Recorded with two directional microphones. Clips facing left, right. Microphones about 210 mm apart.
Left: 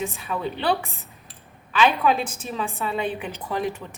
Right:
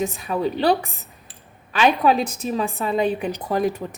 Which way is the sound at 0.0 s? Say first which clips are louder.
Right 5 dB; 40° right (ahead or behind).